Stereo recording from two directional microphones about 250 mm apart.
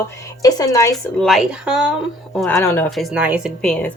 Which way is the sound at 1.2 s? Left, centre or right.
Centre.